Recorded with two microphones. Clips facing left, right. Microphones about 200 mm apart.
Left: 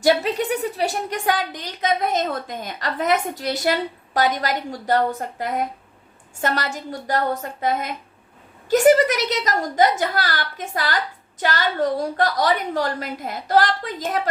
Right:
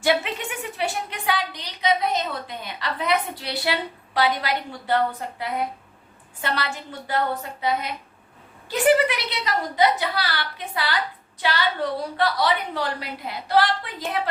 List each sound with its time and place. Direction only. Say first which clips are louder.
0.0 s a woman's voice: left 4 dB; 40° left (ahead or behind)